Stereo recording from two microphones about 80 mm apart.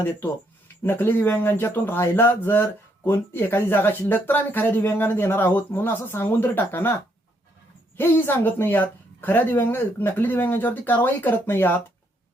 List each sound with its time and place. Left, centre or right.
0.8 s speech: left